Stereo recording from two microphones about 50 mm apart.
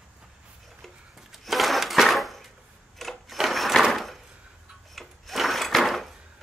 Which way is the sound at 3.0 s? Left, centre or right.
Centre.